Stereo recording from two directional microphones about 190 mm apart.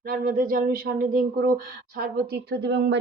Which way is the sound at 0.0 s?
50° right (ahead or behind).